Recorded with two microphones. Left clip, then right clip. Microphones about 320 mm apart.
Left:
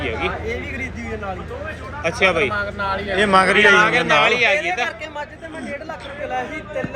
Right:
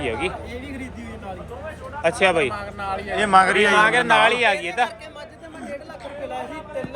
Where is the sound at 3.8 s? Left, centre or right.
Right.